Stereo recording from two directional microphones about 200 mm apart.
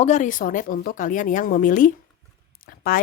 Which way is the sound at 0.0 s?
35° left (ahead or behind).